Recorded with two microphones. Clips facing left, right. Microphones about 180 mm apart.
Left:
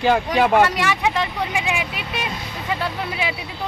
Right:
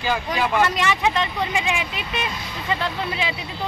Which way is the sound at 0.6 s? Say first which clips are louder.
Left 1 dB; 10° left (ahead or behind).